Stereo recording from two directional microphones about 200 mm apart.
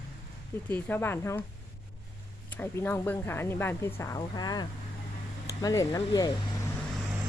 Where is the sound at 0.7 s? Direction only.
10° left (ahead or behind).